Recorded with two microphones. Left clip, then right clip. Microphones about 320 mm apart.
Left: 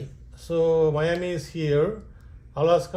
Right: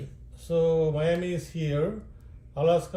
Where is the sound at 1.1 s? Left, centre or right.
Centre.